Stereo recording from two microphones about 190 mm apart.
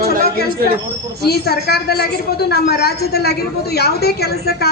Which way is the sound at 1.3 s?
55° left (ahead or behind).